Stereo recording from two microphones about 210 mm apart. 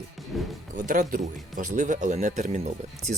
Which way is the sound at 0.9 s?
40° right (ahead or behind).